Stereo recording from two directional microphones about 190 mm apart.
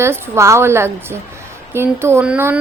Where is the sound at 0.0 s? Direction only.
15° right (ahead or behind).